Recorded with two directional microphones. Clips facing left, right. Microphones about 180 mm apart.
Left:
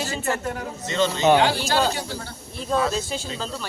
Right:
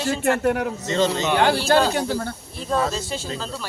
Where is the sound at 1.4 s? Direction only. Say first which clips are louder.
Right 3 dB; 55° right (ahead or behind).